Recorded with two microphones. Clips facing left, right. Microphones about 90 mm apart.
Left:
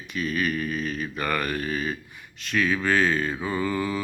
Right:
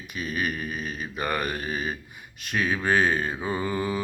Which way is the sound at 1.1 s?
15° right (ahead or behind).